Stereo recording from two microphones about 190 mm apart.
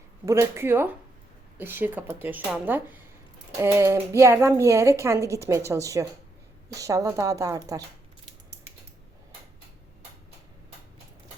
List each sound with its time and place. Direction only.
0.3 s a woman's voice: 15° right (ahead or behind)